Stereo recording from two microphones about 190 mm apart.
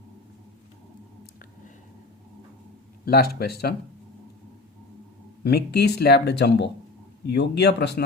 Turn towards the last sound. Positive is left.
turn(degrees=60)  # may be behind; listen again after turning